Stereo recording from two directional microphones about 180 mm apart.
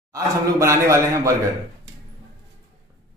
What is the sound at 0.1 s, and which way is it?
A man's voice, 15° right (ahead or behind).